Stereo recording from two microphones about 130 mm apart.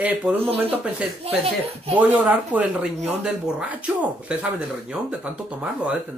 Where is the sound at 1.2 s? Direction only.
50° right (ahead or behind).